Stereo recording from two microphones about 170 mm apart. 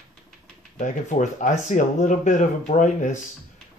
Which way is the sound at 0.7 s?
45° left (ahead or behind).